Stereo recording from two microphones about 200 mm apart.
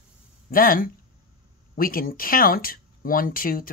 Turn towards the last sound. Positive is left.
turn(degrees=45)  # may be behind; listen again after turning